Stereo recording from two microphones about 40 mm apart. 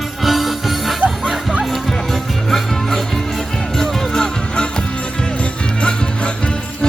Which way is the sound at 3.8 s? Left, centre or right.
Centre.